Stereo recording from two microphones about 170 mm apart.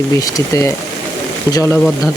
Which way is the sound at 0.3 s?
20° left (ahead or behind).